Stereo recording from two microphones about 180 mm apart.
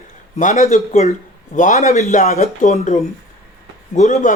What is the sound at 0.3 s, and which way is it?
Speech, 40° left (ahead or behind).